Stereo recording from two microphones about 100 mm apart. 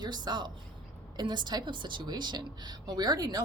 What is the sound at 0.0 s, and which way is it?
A woman's voice, 45° right (ahead or behind).